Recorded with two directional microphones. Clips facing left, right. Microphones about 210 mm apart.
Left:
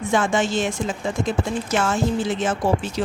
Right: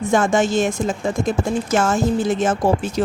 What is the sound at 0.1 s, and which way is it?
Speech, 45° right (ahead or behind).